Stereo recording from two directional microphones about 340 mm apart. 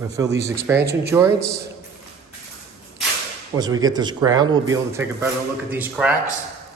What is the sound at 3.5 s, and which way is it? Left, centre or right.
A man's voice, centre.